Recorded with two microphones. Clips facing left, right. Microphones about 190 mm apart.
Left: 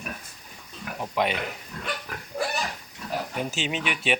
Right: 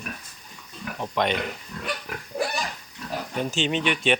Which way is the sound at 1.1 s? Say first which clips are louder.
Right 1 dB; 5° left (ahead or behind).